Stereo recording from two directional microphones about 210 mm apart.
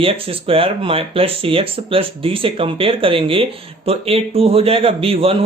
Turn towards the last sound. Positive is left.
turn(degrees=-25)  # may be behind; listen again after turning